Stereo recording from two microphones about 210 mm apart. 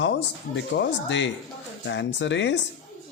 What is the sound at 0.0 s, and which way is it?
Speech, 55° left (ahead or behind).